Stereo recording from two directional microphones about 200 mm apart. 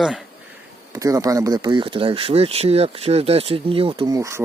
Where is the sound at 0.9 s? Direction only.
15° right (ahead or behind).